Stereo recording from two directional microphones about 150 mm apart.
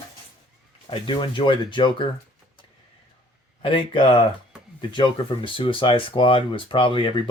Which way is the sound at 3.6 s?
35° left (ahead or behind).